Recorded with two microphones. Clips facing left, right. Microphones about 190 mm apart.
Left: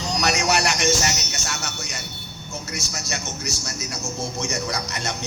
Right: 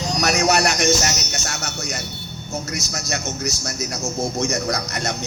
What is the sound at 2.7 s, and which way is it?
A man's voice, 40° right (ahead or behind).